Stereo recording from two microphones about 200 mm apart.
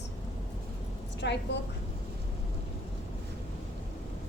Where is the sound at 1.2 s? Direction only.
60° left (ahead or behind).